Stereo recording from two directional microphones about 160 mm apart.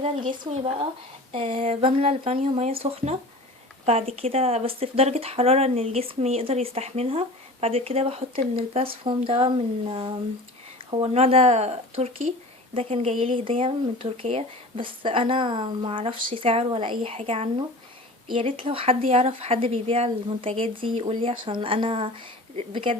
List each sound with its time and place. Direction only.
0.3 s speech: 35° right (ahead or behind)